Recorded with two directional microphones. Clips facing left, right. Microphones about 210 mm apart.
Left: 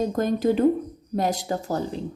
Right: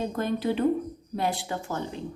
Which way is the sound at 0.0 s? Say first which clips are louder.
Left 5 dB; 40° left (ahead or behind).